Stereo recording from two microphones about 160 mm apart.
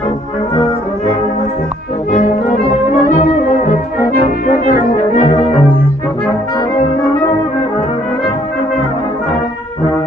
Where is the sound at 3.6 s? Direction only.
60° left (ahead or behind).